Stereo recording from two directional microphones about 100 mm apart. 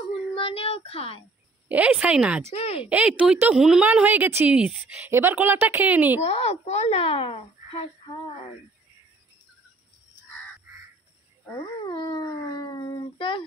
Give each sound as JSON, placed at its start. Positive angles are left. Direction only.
{"t": 0.3, "sound": "a sound", "side_deg": 65}
{"t": 1.7, "sound": "a woman's voice", "side_deg": -15}
{"t": 2.5, "sound": "speech", "side_deg": 90}
{"t": 2.8, "sound": "a woman's voice", "side_deg": -10}
{"t": 3.8, "sound": "a woman's voice", "side_deg": -15}
{"t": 6.2, "sound": "a child's voice", "side_deg": 90}
{"t": 11.8, "sound": "a sound", "side_deg": 50}